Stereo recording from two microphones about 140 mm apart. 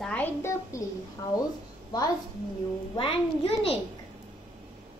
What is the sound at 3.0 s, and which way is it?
Speech, 40° left (ahead or behind).